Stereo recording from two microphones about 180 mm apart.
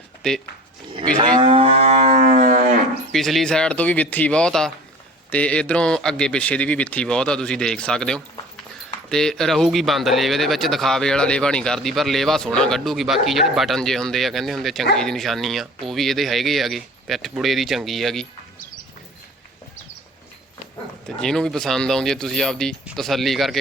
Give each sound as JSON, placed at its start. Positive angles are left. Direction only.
{"t": 0.2, "sound": "speech", "side_deg": 0}
{"t": 1.4, "sound": "livestock", "side_deg": -30}
{"t": 3.1, "sound": "speech", "side_deg": 0}
{"t": 21.2, "sound": "speech", "side_deg": 5}